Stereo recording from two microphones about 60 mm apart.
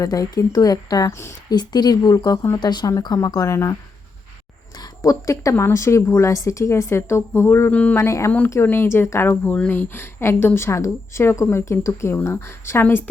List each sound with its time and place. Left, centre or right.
0.0 s speech: left
1.1 s speech: left
1.5 s a woman's voice: left
4.8 s speech: left
7.7 s speech: left
7.9 s speech: left
8.6 s a woman's voice: left
9.6 s speech: left